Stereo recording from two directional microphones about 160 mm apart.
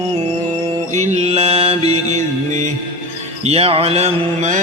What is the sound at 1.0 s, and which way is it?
Mantra, 45° right (ahead or behind).